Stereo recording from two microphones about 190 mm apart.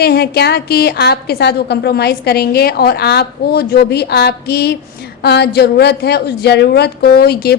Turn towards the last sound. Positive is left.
turn(degrees=55)  # may be behind; listen again after turning